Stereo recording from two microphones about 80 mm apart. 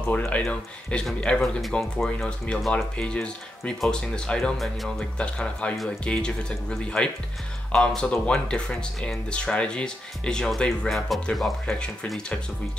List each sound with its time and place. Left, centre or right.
0.5 s speech: centre